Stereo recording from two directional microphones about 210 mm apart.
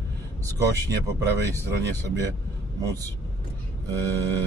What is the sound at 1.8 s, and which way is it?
Speech, 15° right (ahead or behind).